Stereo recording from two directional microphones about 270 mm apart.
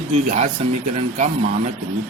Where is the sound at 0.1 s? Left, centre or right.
Right.